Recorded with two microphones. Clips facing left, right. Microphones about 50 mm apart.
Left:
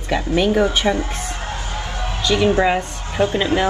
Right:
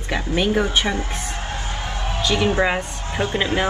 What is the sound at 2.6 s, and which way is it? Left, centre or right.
Speech, centre.